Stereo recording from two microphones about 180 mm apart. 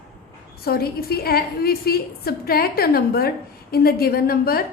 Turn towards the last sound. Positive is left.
turn(degrees=55)  # may be behind; listen again after turning